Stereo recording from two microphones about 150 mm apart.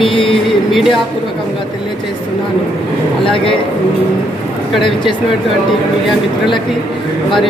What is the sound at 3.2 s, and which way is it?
Speech, 35° left (ahead or behind).